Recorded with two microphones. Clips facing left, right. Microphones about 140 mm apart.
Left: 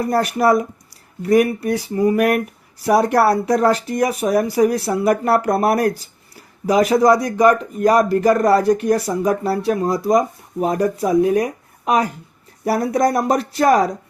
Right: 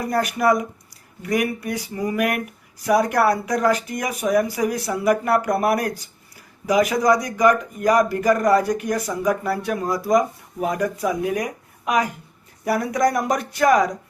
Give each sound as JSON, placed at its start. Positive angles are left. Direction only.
{"t": 0.0, "sound": "speech", "side_deg": 30}